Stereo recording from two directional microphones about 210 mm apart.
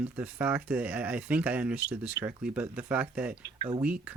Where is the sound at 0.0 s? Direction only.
5° right (ahead or behind).